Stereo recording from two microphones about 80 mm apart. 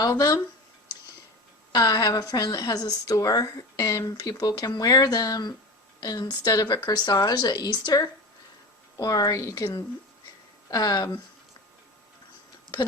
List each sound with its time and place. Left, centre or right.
0.0 s speech: left
1.7 s speech: left
10.7 s speech: left